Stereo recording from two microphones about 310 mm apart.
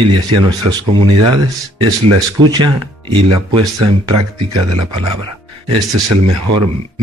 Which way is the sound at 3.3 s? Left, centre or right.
Right.